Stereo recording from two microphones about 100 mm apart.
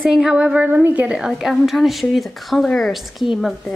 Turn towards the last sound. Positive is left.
turn(degrees=0)  # may be behind; listen again after turning